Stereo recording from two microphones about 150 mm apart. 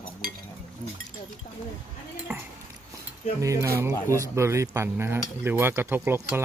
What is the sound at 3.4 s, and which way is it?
Speech, 20° right (ahead or behind).